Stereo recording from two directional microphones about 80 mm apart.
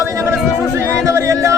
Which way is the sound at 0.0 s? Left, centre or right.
Right.